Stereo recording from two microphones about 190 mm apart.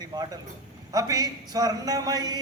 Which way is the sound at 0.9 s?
20° right (ahead or behind).